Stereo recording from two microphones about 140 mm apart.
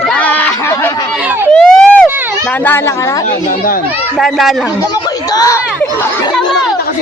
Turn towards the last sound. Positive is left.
turn(degrees=25)  # may be behind; listen again after turning